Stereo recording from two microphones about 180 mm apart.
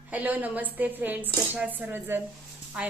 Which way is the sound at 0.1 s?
10° right (ahead or behind).